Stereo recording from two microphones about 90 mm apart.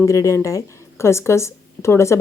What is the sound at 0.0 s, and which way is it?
Speech, 35° left (ahead or behind).